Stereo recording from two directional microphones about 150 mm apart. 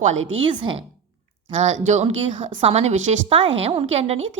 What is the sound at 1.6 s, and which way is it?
A woman's voice, 50° right (ahead or behind).